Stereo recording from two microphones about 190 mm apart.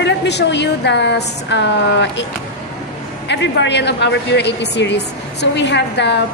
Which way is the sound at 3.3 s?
65° left (ahead or behind).